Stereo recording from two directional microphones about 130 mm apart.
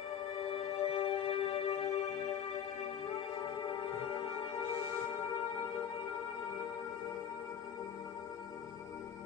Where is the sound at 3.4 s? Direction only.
35° left (ahead or behind).